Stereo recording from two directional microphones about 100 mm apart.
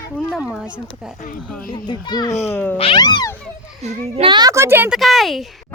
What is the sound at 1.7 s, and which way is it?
Speech, 50° left (ahead or behind).